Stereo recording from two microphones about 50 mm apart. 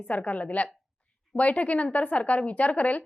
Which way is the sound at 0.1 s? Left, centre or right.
Left.